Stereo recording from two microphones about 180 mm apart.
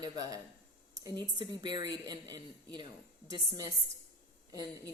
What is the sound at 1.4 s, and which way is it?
A woman's voice, 25° right (ahead or behind).